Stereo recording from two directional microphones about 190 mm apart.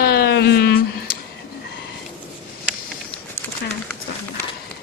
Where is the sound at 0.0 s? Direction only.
55° left (ahead or behind).